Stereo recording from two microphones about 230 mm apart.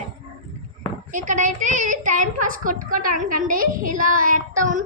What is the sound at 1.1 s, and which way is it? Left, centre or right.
A woman's voice, right.